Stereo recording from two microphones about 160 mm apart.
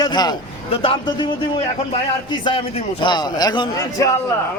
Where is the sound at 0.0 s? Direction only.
25° left (ahead or behind).